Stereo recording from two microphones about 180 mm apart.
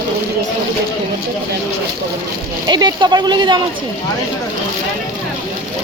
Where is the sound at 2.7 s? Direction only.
25° right (ahead or behind).